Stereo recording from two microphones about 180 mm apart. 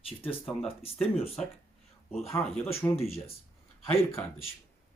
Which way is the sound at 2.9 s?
35° left (ahead or behind).